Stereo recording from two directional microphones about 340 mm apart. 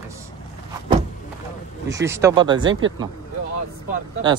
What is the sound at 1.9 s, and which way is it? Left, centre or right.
Speech, centre.